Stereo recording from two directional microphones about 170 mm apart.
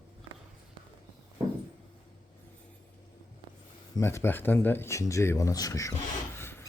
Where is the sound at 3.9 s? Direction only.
15° left (ahead or behind).